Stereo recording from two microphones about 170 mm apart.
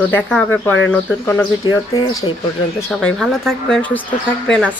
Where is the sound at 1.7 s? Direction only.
20° left (ahead or behind).